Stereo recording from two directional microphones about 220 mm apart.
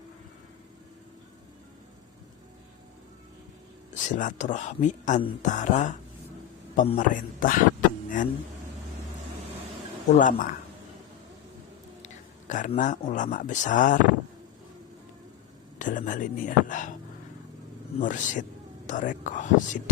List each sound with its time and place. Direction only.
3.9 s speech: 35° left (ahead or behind)
10.2 s speech: 35° left (ahead or behind)
12.0 s speech: 35° left (ahead or behind)
15.8 s speech: 35° left (ahead or behind)
18.0 s speech: 35° left (ahead or behind)